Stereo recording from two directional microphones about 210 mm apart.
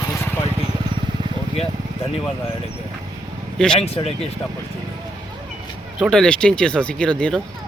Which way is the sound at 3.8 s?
30° left (ahead or behind).